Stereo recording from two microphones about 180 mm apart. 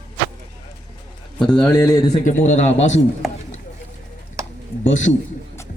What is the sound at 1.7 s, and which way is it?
Speech, 20° left (ahead or behind).